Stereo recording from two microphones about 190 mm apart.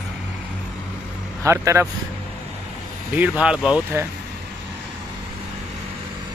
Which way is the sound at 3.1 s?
5° right (ahead or behind).